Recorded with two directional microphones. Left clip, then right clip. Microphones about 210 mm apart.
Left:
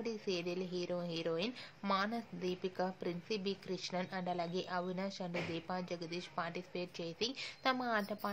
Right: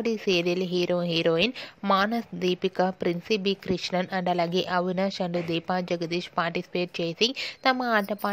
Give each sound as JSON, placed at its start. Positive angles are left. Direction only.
{"t": 0.0, "sound": "a woman's voice", "side_deg": -40}